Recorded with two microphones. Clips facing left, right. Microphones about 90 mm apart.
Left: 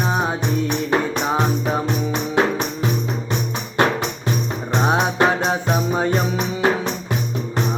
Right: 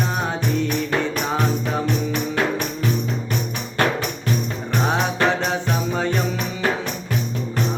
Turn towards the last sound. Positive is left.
turn(degrees=20)  # may be behind; listen again after turning